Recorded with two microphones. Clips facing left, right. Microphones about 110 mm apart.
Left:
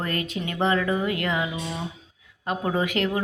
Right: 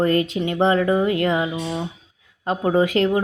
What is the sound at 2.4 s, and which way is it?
Speech, 30° right (ahead or behind).